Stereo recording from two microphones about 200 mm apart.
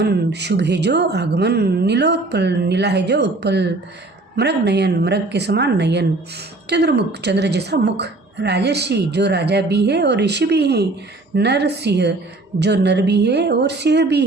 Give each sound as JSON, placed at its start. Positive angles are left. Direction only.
{"t": 0.0, "sound": "a woman's voice", "side_deg": -55}